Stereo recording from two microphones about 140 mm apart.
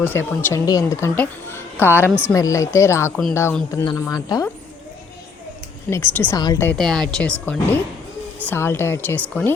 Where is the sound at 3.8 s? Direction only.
30° left (ahead or behind).